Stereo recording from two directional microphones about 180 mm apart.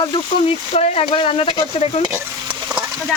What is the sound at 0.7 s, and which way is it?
Speech, 35° left (ahead or behind).